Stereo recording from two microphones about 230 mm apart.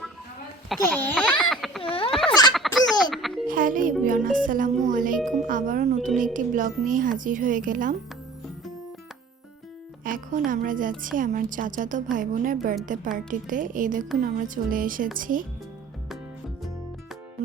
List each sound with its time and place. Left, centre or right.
0.7 s speech: centre
1.1 s baby laughter: centre
1.8 s a sound: left
2.5 s a sound: centre
3.0 s music: centre
3.4 s music: right
4.0 s a woman's voice: right
10.0 s a woman's voice: right